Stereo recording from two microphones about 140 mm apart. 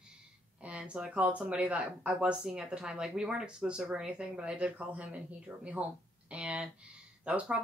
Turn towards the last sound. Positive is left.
turn(degrees=-5)  # may be behind; listen again after turning